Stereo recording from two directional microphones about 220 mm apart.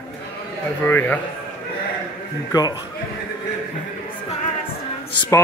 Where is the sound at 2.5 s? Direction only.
15° left (ahead or behind).